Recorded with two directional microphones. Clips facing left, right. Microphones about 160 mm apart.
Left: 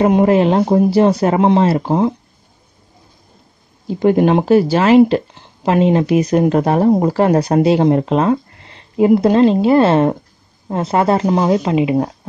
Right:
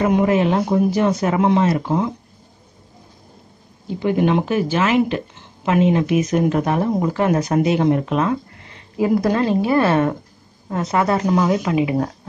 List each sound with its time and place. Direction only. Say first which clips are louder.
0.0 s speech: left 5 dB; 35° left (ahead or behind)
3.8 s speech: left 6 dB; 40° left (ahead or behind); by 12.1 s 20° left (ahead or behind)